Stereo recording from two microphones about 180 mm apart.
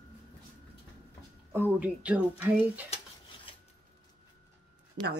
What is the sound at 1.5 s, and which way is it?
Speech, 10° right (ahead or behind).